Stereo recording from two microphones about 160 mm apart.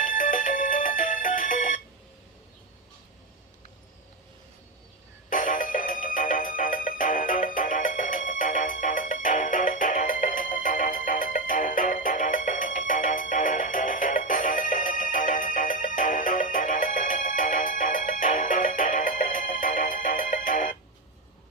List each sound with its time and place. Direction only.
0.0 s music: 55° left (ahead or behind)
5.3 s music: 60° left (ahead or behind)